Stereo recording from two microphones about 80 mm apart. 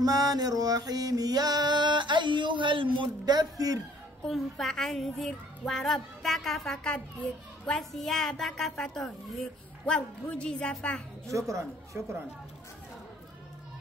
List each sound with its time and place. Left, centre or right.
0.0 s music: right
4.3 s a child's voice: centre
11.2 s speech: right